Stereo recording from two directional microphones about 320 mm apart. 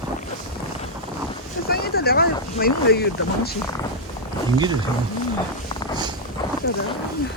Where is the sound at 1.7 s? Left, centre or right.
Left.